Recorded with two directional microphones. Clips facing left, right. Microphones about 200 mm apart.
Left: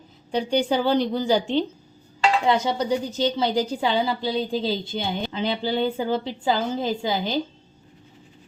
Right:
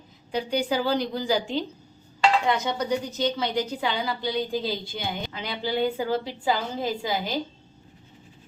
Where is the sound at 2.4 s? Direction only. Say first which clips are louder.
Left 4 dB; 30° left (ahead or behind).